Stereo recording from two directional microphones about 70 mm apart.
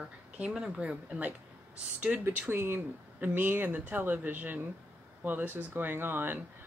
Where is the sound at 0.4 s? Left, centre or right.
Centre.